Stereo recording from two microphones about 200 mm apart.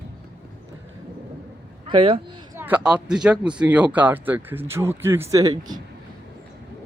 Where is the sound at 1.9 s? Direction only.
25° right (ahead or behind).